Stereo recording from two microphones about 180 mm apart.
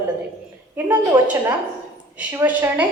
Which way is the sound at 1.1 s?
20° right (ahead or behind).